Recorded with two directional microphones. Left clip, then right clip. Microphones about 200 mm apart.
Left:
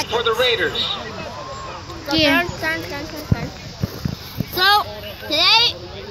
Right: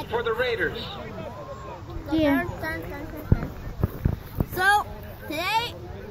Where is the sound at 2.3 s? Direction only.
20° left (ahead or behind).